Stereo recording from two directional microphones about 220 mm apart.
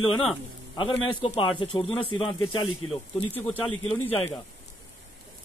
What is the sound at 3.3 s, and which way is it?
Speech, centre (ahead or behind).